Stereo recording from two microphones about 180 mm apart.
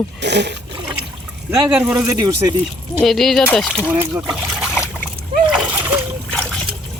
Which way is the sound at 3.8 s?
10° right (ahead or behind).